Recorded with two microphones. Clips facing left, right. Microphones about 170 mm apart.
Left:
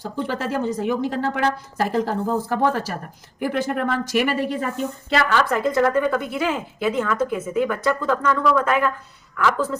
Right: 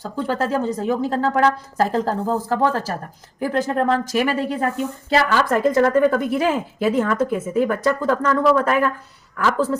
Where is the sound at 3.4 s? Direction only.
35° right (ahead or behind).